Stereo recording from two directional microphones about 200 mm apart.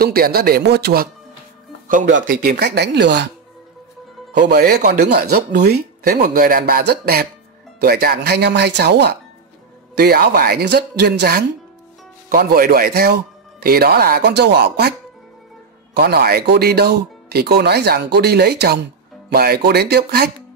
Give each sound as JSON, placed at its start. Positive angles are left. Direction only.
{"t": 0.0, "sound": "speech", "side_deg": -50}
{"t": 1.9, "sound": "speech", "side_deg": -40}
{"t": 2.2, "sound": "speech", "side_deg": -50}
{"t": 4.3, "sound": "speech", "side_deg": -60}